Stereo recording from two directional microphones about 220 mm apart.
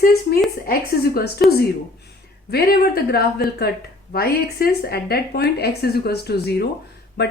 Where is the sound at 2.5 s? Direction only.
45° left (ahead or behind).